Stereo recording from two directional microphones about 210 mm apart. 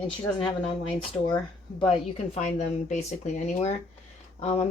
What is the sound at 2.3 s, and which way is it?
Speech, 35° left (ahead or behind).